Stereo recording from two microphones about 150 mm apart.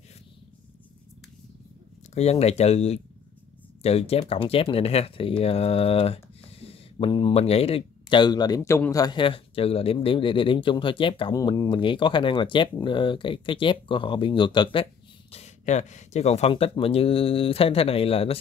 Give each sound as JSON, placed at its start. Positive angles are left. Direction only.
{"t": 2.1, "sound": "speech", "side_deg": 45}
{"t": 15.3, "sound": "speech", "side_deg": 50}